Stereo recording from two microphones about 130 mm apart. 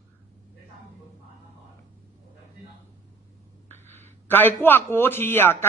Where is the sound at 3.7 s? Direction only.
15° left (ahead or behind).